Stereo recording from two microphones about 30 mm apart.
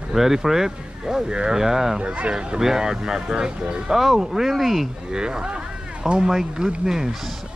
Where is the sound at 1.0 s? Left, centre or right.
Right.